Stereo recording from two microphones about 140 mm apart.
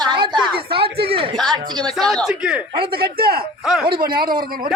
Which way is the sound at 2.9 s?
90° right.